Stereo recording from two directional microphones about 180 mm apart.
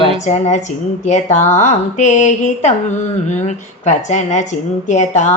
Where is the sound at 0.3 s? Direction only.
40° left (ahead or behind).